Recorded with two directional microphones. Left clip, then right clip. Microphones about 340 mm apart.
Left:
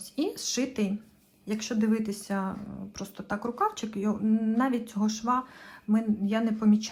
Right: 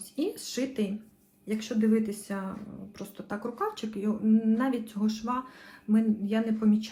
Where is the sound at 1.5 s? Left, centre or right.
Centre.